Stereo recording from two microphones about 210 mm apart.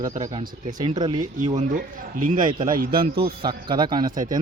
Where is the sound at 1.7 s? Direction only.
40° right (ahead or behind).